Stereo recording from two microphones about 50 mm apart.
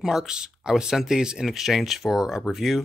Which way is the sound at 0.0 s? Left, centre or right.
Centre.